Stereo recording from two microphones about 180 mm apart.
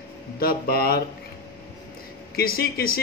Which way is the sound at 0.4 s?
60° left (ahead or behind).